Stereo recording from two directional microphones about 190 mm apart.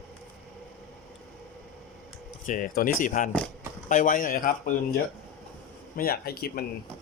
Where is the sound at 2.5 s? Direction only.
45° left (ahead or behind).